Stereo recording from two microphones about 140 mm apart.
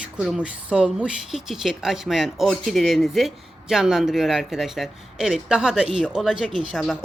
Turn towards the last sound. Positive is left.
turn(degrees=0)  # may be behind; listen again after turning